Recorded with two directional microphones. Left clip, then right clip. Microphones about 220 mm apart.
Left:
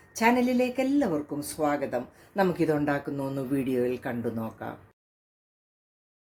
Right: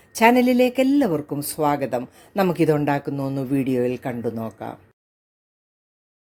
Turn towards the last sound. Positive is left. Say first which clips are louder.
# right 5 dB
turn(degrees=-30)  # may be behind; listen again after turning